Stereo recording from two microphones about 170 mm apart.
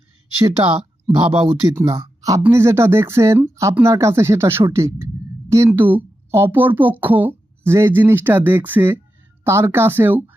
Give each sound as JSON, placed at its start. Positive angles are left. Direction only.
{"t": 0.4, "sound": "speech", "side_deg": -25}
{"t": 1.9, "sound": "speech", "side_deg": -20}